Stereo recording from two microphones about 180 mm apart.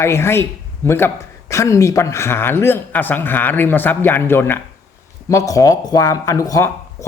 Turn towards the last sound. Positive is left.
turn(degrees=20)  # may be behind; listen again after turning